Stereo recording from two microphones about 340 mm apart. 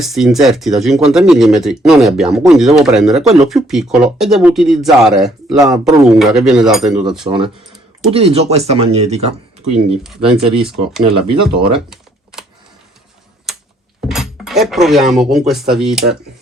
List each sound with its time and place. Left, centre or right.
0.0 s speech: centre
7.3 s speech: centre
10.0 s speech: centre
11.9 s typing: centre
14.1 s speech: centre